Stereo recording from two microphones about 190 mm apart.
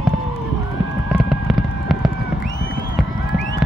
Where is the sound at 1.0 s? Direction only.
5° right (ahead or behind).